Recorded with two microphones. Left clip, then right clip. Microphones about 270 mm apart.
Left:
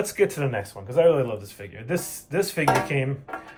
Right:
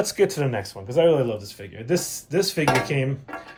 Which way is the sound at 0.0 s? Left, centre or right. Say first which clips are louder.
Right 2 dB; centre.